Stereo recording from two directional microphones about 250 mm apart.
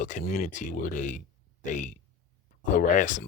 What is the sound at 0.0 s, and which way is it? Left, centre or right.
Speech, left.